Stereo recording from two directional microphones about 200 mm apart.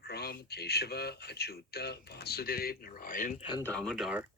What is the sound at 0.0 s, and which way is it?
Speech, 55° left (ahead or behind).